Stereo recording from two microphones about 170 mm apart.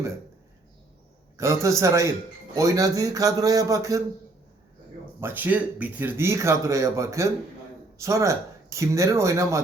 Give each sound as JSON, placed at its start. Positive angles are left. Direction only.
{"t": 1.4, "sound": "a man's voice", "side_deg": -15}
{"t": 5.2, "sound": "speech", "side_deg": -10}